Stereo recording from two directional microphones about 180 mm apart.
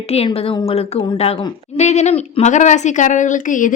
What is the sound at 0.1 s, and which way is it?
A woman's voice, 35° left (ahead or behind).